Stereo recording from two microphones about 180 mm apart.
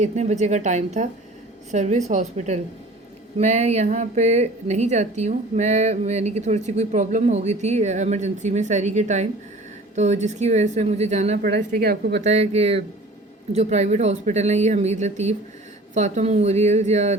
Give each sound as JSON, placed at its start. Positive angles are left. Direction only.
{"t": 0.0, "sound": "a woman's voice", "side_deg": -40}
{"t": 11.4, "sound": "speech", "side_deg": -60}
{"t": 12.2, "sound": "a woman's voice", "side_deg": -40}